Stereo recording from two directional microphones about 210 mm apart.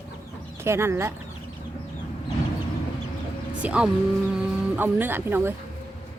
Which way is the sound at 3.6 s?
5° right (ahead or behind).